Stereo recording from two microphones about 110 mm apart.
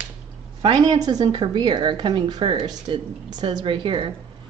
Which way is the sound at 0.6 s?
45° right (ahead or behind).